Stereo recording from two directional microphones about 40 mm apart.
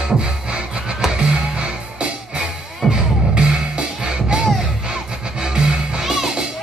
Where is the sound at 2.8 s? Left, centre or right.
Centre.